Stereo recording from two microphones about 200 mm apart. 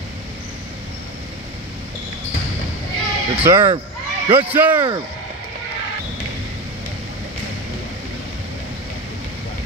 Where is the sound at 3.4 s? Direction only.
10° right (ahead or behind).